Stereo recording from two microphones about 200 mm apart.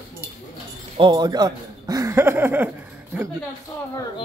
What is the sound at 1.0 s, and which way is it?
Speech, 20° right (ahead or behind).